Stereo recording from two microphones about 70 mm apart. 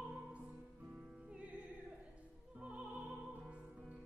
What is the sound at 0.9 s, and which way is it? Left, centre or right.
Music, centre.